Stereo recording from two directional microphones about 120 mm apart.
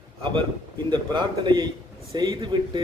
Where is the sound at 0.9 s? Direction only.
40° right (ahead or behind).